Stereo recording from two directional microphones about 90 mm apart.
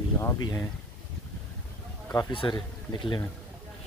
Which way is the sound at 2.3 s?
65° left (ahead or behind).